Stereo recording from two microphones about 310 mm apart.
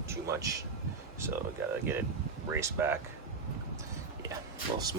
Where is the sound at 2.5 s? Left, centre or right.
Centre.